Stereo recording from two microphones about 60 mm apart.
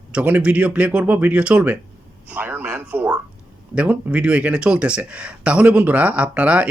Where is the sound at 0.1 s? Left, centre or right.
Right.